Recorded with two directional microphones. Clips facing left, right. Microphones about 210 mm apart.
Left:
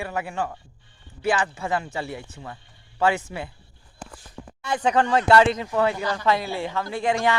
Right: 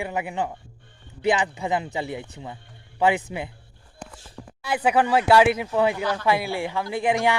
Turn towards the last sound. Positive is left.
turn(degrees=-15)  # may be behind; listen again after turning